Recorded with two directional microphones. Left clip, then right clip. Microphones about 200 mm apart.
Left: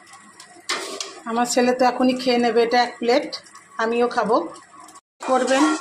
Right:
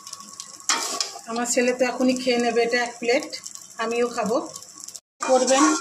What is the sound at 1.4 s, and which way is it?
Speech, 15° left (ahead or behind).